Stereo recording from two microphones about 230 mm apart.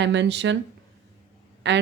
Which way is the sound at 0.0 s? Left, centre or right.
Right.